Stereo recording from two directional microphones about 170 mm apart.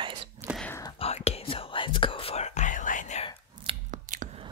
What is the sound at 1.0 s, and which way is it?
Whispering, 40° left (ahead or behind).